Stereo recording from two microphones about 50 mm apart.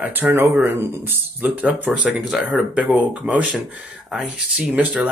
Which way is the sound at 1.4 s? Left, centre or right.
Right.